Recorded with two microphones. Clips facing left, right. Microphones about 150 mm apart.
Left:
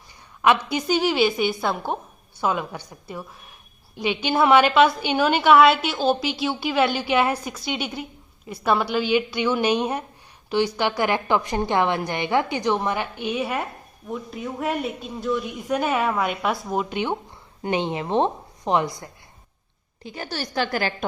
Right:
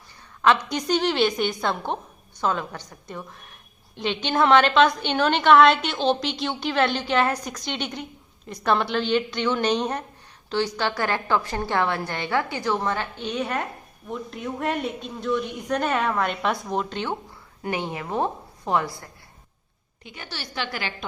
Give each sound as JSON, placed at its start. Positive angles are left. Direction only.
{"t": 0.4, "sound": "a woman's voice", "side_deg": 10}
{"t": 20.1, "sound": "a woman's voice", "side_deg": 40}